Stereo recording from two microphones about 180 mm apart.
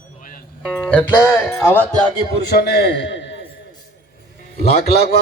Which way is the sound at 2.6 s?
60° left (ahead or behind).